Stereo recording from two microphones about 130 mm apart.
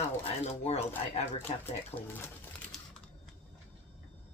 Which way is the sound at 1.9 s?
50° left (ahead or behind).